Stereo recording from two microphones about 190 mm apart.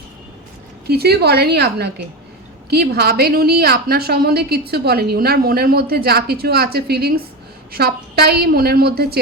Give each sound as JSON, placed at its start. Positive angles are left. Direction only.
{"t": 0.9, "sound": "a woman's voice", "side_deg": -55}